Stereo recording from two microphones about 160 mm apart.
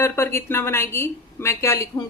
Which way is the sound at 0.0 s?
15° left (ahead or behind).